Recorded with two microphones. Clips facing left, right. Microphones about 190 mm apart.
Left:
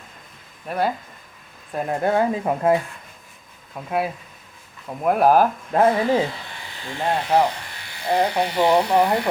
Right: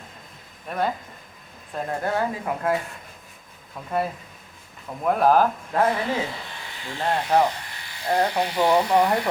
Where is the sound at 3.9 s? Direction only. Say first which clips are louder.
Left 2 dB; 5° left (ahead or behind).